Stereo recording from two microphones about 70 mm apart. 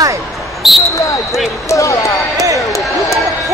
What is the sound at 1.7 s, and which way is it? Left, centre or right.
Speech, left.